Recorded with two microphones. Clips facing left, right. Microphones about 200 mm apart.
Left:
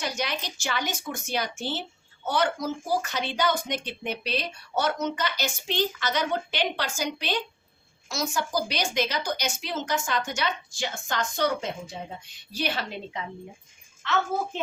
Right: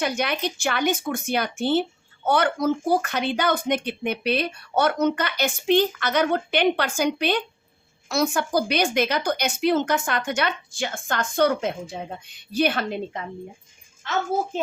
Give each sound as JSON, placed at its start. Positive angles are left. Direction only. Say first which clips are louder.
{"t": 0.0, "sound": "a child's voice", "louder": "right 6 dB", "side_deg": -60}